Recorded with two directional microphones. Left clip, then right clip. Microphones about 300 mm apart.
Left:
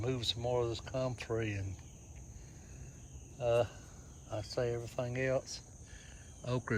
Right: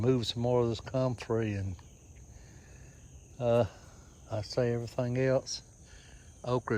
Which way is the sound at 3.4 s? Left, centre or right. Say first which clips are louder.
Right 4 dB; centre.